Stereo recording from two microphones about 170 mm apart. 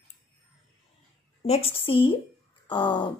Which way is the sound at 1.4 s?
35° left (ahead or behind).